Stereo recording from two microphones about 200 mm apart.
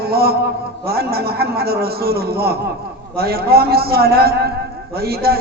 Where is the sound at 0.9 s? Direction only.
50° right (ahead or behind).